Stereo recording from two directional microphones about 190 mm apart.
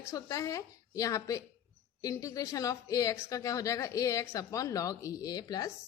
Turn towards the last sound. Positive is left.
turn(degrees=20)  # may be behind; listen again after turning